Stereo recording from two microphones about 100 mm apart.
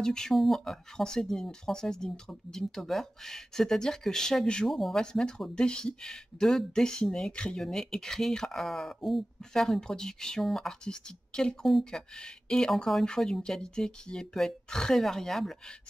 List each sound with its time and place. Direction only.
0.0 s speech: 5° left (ahead or behind)